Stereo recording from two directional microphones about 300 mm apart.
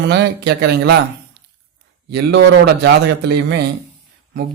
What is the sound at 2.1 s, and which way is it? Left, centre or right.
A man's voice, right.